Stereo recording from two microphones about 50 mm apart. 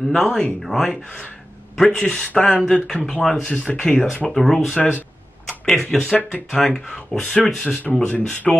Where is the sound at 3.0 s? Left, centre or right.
Left.